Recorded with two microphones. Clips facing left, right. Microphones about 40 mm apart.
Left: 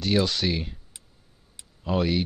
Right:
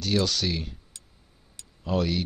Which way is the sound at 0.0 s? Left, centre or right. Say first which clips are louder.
Left 2 dB; centre.